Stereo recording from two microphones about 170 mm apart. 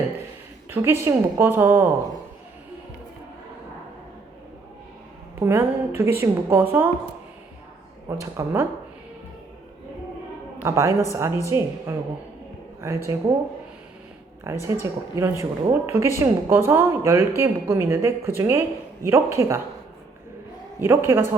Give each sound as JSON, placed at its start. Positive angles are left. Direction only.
{"t": 0.7, "sound": "speech", "side_deg": -15}
{"t": 5.4, "sound": "speech", "side_deg": -15}
{"t": 8.2, "sound": "speech", "side_deg": -15}
{"t": 10.6, "sound": "speech", "side_deg": -15}
{"t": 13.1, "sound": "speech", "side_deg": -15}
{"t": 14.4, "sound": "speech", "side_deg": -15}
{"t": 20.8, "sound": "speech", "side_deg": -15}